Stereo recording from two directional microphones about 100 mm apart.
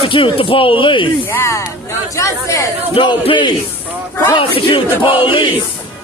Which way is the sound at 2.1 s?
30° left (ahead or behind).